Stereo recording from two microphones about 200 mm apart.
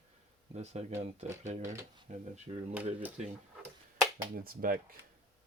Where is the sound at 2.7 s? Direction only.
5° right (ahead or behind).